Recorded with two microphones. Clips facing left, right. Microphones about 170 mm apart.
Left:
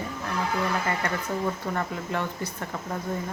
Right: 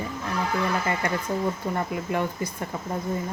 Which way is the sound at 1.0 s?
10° right (ahead or behind).